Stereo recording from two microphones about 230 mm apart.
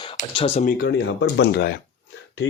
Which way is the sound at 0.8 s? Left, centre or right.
Left.